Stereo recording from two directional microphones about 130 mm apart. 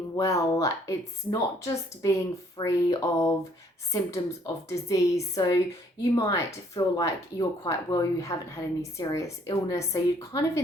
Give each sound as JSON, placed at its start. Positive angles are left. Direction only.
{"t": 0.2, "sound": "a woman's voice", "side_deg": 25}